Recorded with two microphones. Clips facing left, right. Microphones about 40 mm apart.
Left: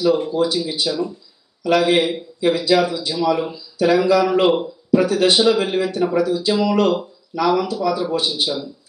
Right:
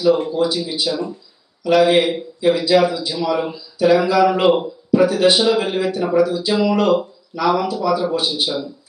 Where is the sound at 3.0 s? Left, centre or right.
Centre.